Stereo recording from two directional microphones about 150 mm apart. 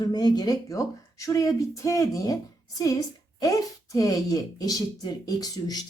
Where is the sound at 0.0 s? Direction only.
25° left (ahead or behind).